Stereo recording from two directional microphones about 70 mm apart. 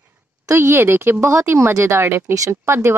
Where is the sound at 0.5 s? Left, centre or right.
Right.